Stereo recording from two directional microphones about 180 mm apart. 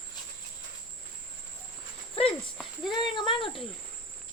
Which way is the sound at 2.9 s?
25° left (ahead or behind).